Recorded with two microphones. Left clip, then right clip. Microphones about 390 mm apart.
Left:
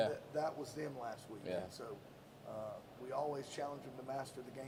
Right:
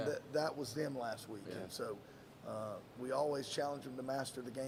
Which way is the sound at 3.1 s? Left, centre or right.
Right.